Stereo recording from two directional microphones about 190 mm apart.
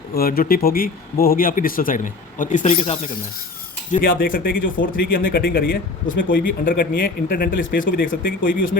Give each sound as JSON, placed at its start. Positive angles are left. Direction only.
{"t": 0.1, "sound": "speech", "side_deg": 50}
{"t": 2.6, "sound": "speech", "side_deg": 30}
{"t": 4.2, "sound": "speech", "side_deg": 50}